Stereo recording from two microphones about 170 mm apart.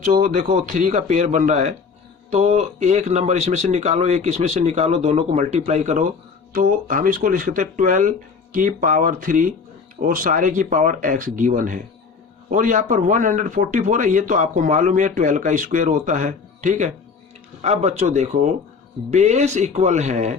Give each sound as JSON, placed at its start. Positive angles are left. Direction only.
{"t": 0.2, "sound": "speech", "side_deg": -45}